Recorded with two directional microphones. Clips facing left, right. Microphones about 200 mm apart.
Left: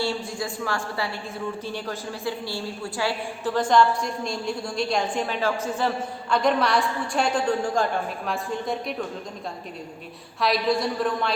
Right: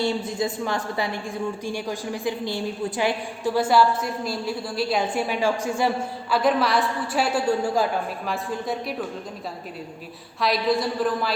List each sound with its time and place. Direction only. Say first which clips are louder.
0.0 s a woman's voice: right 3 dB; 20° right (ahead or behind); by 9.0 s centre (ahead or behind)
10.4 s a woman's voice: right 1 dB; centre (ahead or behind)